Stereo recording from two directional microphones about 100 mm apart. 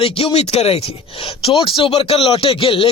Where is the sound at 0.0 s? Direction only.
70° left (ahead or behind); by 0.8 s 90° left.